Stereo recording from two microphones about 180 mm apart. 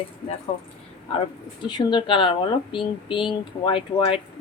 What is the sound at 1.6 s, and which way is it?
Speech, 25° left (ahead or behind).